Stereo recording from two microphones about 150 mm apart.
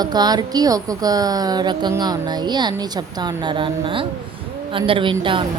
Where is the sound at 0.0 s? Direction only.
25° right (ahead or behind).